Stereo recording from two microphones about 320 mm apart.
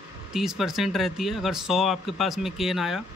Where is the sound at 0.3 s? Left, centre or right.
Centre.